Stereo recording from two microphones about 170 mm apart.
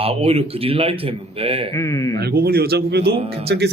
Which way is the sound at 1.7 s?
20° left (ahead or behind).